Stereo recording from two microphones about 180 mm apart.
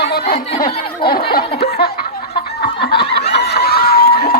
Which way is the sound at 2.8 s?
60° left (ahead or behind).